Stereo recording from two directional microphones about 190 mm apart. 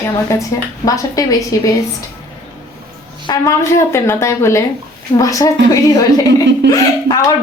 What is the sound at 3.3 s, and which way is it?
A woman's voice, 15° left (ahead or behind).